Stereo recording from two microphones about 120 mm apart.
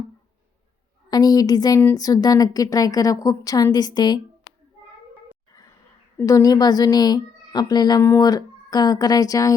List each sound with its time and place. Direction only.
1.1 s a woman's voice: 35° left (ahead or behind)
6.2 s a woman's voice: 30° left (ahead or behind)